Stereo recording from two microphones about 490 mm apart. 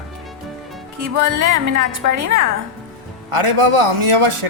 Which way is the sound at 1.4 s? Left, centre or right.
Right.